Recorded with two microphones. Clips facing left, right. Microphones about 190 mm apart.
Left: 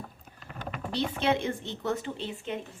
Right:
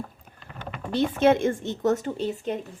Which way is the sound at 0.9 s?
50° right (ahead or behind).